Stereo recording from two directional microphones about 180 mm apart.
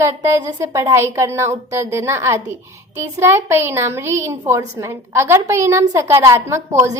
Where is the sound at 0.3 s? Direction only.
15° right (ahead or behind).